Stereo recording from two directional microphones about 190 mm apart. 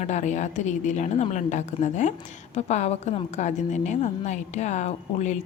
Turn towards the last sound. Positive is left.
turn(degrees=40)  # may be behind; listen again after turning